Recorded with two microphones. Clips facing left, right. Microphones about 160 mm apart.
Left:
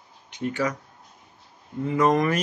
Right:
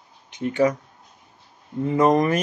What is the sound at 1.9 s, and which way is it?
Speech, 35° right (ahead or behind).